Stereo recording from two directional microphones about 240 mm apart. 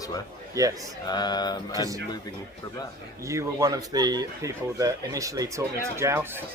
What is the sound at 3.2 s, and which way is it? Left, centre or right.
Speech, centre.